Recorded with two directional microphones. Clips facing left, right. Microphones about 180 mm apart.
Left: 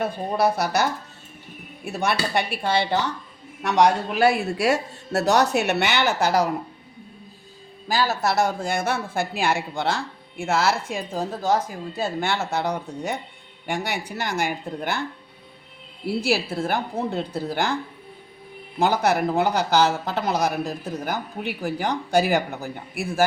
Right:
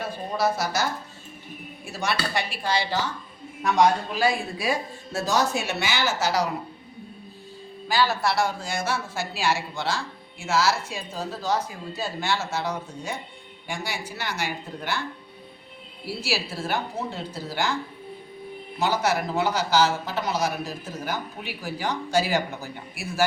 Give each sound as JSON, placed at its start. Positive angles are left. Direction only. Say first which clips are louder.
{"t": 0.0, "sound": "speech", "louder": "left 4 dB", "side_deg": 60}
{"t": 3.6, "sound": "speech", "louder": "left 2 dB", "side_deg": 75}
{"t": 7.9, "sound": "speech", "louder": "left 1 dB", "side_deg": 40}
{"t": 14.2, "sound": "speech", "louder": "left 6 dB", "side_deg": 50}
{"t": 16.0, "sound": "speech", "louder": "left 6 dB", "side_deg": 55}
{"t": 18.8, "sound": "speech", "louder": "left 4 dB", "side_deg": 55}